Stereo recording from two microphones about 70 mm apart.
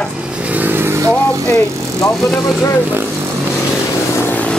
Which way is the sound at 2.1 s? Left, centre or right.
Centre.